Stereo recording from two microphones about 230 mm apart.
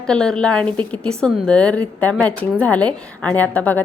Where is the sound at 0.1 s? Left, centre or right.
Centre.